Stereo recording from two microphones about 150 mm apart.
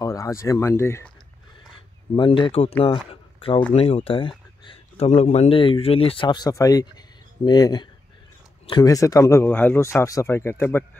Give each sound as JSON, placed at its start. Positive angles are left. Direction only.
{"t": 0.0, "sound": "speech", "side_deg": 20}
{"t": 2.1, "sound": "speech", "side_deg": 35}
{"t": 3.1, "sound": "a sound", "side_deg": 35}
{"t": 3.7, "sound": "speech", "side_deg": 40}
{"t": 8.9, "sound": "speech", "side_deg": 20}